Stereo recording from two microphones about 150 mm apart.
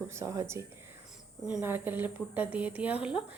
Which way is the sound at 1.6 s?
15° right (ahead or behind).